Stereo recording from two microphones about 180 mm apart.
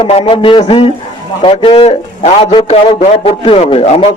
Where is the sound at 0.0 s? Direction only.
30° left (ahead or behind).